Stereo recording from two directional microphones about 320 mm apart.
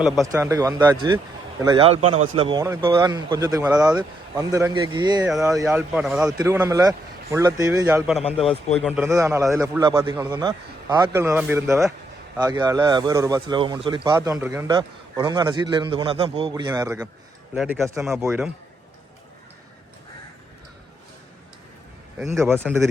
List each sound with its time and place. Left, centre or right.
0.0 s speech: centre
2.0 s a man's voice: right
2.3 s speech: centre
5.3 s speech: centre
22.4 s speech: centre